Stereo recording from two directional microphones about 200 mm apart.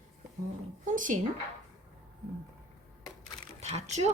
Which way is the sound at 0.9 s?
40° right (ahead or behind).